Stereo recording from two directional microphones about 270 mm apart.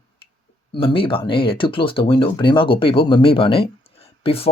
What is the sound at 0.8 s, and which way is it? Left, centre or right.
Speech, centre.